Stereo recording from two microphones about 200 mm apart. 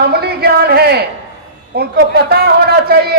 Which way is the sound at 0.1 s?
55° right (ahead or behind).